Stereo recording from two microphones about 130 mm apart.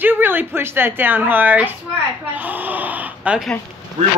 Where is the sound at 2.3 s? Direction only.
10° right (ahead or behind).